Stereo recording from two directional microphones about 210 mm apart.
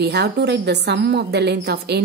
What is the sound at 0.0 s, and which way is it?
A woman's voice, 50° right (ahead or behind).